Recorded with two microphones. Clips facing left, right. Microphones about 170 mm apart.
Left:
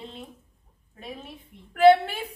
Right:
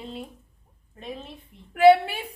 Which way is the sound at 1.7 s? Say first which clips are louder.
Right 1 dB; 10° right (ahead or behind).